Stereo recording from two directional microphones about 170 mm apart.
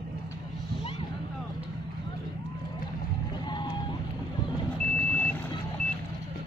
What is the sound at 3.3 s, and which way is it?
Whale vocalization, 25° left (ahead or behind).